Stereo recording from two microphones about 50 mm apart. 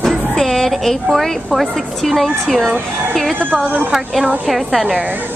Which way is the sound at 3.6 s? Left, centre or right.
Right.